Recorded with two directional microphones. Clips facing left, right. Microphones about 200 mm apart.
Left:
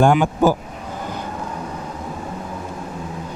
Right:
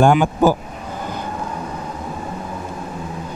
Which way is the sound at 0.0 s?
15° right (ahead or behind).